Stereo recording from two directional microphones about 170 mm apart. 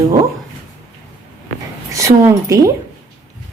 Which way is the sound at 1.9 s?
15° right (ahead or behind).